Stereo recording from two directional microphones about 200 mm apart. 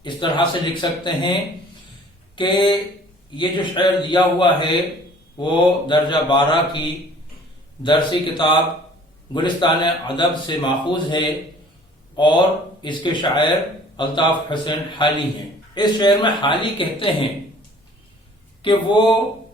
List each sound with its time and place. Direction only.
0.0 s a man's voice: 25° left (ahead or behind)
18.6 s a man's voice: 25° left (ahead or behind)